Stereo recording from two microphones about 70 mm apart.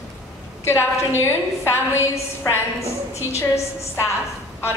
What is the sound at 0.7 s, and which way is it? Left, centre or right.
A woman's voice, left.